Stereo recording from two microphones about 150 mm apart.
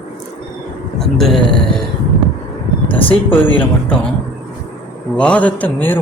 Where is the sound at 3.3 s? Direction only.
15° left (ahead or behind).